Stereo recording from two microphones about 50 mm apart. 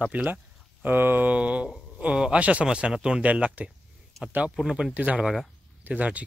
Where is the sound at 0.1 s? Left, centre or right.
Right.